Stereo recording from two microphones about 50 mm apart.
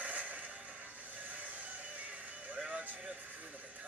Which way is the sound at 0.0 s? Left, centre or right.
Right.